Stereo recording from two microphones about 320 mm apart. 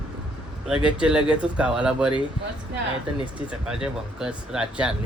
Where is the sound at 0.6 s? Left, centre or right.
Centre.